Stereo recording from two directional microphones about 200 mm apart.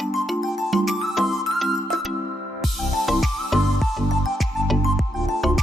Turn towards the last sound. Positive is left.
turn(degrees=0)  # may be behind; listen again after turning